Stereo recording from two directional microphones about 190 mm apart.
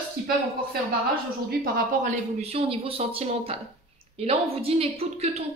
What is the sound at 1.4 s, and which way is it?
Speech, 45° right (ahead or behind).